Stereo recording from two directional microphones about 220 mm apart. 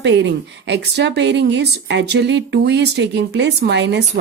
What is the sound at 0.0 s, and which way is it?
A woman's voice, 55° right (ahead or behind).